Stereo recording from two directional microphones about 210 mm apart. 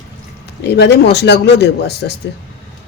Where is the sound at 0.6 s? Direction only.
50° left (ahead or behind).